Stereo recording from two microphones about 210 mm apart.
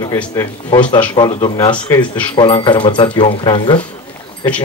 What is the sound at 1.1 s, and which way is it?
Speech, 20° left (ahead or behind).